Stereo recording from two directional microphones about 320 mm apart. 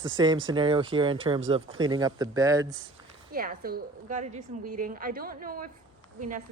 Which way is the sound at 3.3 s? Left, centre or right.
Right.